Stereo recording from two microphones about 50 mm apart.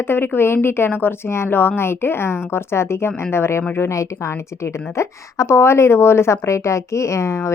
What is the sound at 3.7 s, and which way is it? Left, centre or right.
A woman's voice, left.